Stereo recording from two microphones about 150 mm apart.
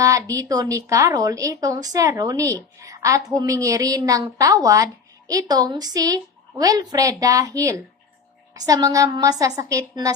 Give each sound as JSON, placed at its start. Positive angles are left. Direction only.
{"t": 0.0, "sound": "speech", "side_deg": -20}